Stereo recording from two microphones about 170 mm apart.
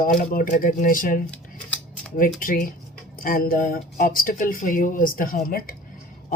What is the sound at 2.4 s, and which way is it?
Speech, 55° left (ahead or behind).